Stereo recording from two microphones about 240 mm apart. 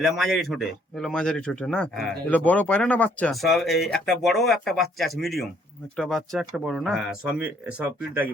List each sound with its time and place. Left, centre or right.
0.0 s speech: centre